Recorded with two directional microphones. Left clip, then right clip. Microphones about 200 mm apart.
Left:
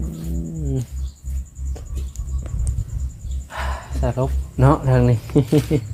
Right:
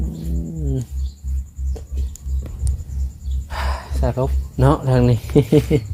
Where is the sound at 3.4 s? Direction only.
20° right (ahead or behind).